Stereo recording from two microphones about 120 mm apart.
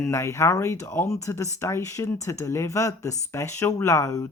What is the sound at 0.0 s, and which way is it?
Speech, 25° left (ahead or behind).